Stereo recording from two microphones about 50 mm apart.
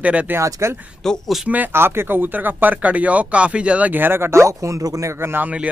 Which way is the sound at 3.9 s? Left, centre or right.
Right.